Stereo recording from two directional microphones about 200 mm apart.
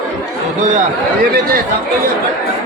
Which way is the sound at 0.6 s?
40° right (ahead or behind).